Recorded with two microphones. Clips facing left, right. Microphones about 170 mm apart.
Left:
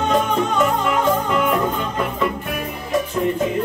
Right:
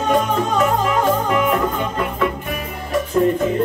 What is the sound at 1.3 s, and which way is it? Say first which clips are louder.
Music: right 1 dB; centre (ahead or behind).